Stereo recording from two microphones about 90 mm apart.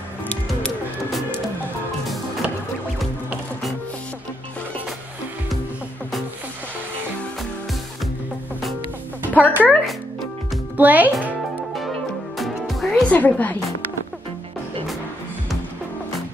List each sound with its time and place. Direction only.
0.3 s music: 15° left (ahead or behind)
9.3 s speech: 20° left (ahead or behind)
10.8 s a child's voice: 20° right (ahead or behind)
12.4 s music: centre (ahead or behind)
12.9 s a woman's voice: 20° left (ahead or behind)